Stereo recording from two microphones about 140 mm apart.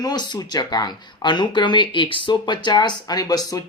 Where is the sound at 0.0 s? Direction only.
30° left (ahead or behind).